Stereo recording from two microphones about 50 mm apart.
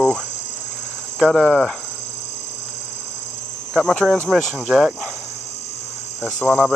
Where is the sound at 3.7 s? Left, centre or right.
Centre.